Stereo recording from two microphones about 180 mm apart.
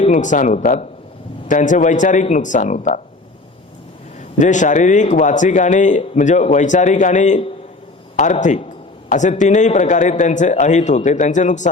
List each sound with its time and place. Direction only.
0.0 s a man's voice: 45° left (ahead or behind)
4.4 s a man's voice: 45° left (ahead or behind)